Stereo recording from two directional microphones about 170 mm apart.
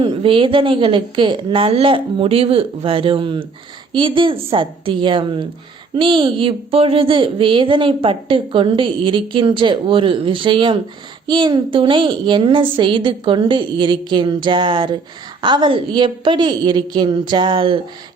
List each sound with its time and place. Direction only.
0.0 s a woman's voice: 30° right (ahead or behind)